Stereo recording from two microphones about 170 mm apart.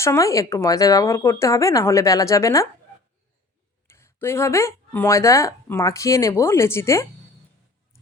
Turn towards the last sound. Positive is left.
turn(degrees=15)  # may be behind; listen again after turning